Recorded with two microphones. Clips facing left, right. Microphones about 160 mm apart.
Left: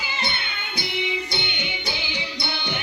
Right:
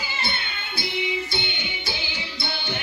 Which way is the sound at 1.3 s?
15° left (ahead or behind).